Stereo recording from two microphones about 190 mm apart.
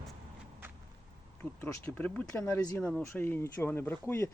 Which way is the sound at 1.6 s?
10° left (ahead or behind).